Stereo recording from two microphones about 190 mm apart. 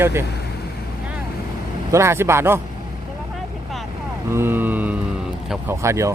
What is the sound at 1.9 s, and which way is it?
Speech, 15° right (ahead or behind).